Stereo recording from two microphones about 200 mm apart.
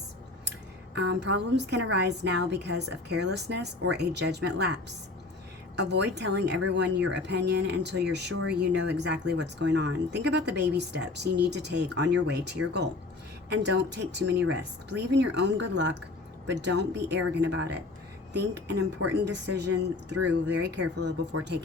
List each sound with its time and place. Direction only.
0.9 s speech: 60° right (ahead or behind)